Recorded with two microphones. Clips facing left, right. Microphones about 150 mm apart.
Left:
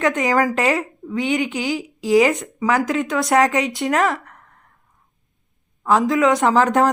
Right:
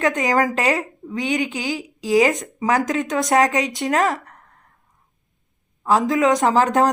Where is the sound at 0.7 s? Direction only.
40° right (ahead or behind).